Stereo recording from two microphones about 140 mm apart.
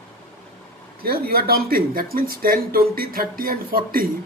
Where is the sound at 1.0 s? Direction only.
90° right.